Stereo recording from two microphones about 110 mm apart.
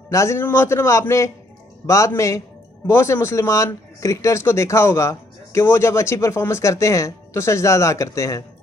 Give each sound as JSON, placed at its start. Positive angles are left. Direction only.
{"t": 0.1, "sound": "speech", "side_deg": 25}